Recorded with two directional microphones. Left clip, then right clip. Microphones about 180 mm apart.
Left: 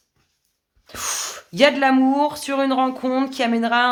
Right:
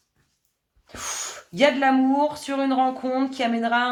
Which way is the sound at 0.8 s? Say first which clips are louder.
Left 5 dB; 45° left (ahead or behind).